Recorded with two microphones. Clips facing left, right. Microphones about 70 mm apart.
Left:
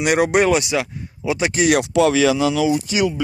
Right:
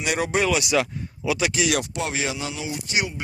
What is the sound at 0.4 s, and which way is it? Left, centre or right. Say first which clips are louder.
Speech: left 4 dB; left.